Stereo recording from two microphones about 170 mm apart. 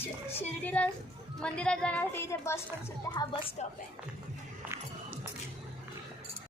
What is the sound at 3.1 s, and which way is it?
Speech, 30° left (ahead or behind).